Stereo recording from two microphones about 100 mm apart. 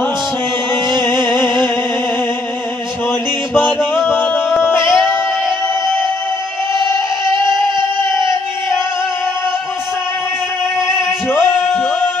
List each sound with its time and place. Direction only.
0.8 s music: 25° left (ahead or behind)
3.1 s music: 20° left (ahead or behind)
10.9 s male singing: 20° left (ahead or behind)